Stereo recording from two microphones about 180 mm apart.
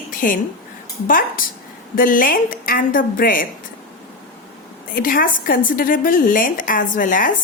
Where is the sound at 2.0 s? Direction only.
50° left (ahead or behind).